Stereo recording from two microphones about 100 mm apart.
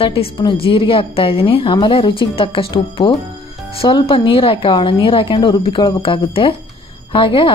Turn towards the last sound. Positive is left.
turn(degrees=60)  # may be behind; listen again after turning